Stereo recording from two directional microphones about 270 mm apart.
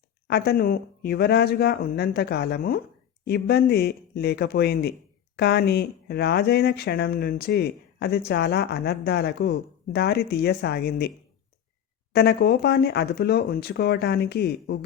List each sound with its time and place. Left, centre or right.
0.3 s speech: left
12.1 s speech: left